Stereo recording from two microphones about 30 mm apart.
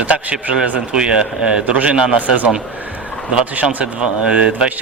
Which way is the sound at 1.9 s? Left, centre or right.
Right.